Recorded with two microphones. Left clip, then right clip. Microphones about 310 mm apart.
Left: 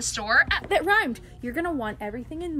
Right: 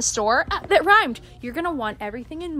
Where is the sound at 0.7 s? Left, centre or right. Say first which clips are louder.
Right 6 dB; right.